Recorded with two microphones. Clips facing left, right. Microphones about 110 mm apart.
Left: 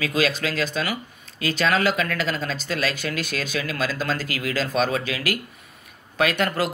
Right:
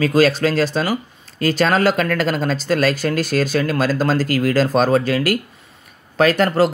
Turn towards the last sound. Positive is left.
turn(degrees=-35)  # may be behind; listen again after turning